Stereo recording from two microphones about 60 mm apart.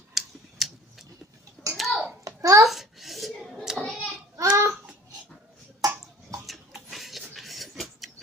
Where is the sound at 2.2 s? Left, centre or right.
Right.